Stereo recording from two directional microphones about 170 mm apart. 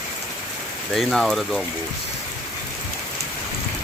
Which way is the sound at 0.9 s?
Centre (ahead or behind).